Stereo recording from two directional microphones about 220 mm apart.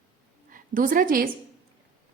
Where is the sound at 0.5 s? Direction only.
40° right (ahead or behind).